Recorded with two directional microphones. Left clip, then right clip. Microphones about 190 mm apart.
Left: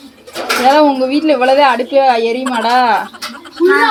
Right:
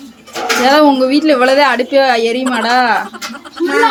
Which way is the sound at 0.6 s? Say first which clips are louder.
Even; 20° right (ahead or behind).